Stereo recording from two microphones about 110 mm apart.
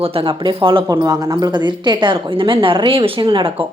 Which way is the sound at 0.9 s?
35° right (ahead or behind).